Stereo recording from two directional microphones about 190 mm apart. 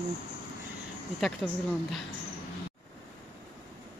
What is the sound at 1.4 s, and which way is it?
Speech, centre (ahead or behind).